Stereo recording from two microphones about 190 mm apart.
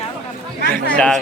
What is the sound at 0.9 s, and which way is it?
Speech, 5° left (ahead or behind).